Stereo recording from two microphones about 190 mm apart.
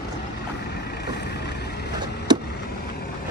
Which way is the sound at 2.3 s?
25° right (ahead or behind).